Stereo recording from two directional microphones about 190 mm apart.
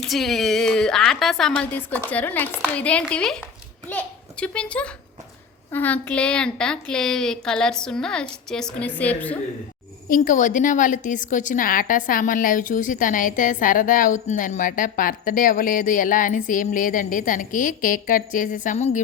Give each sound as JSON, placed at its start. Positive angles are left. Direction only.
{"t": 0.0, "sound": "a woman's voice", "side_deg": 0}
{"t": 10.1, "sound": "a woman's voice", "side_deg": 45}